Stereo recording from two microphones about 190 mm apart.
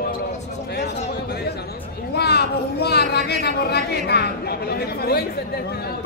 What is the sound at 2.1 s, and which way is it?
Speech, 60° left (ahead or behind).